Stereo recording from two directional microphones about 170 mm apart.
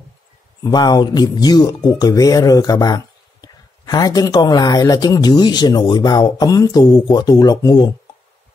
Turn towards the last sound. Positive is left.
turn(degrees=25)  # may be behind; listen again after turning